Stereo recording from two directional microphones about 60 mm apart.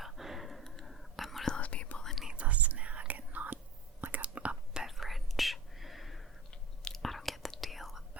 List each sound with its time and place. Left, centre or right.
0.0 s whispering: centre
1.5 s whispering: left
2.3 s whispering: right
4.8 s whispering: centre